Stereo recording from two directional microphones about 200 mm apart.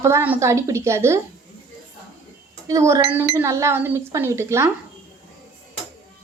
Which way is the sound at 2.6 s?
15° right (ahead or behind).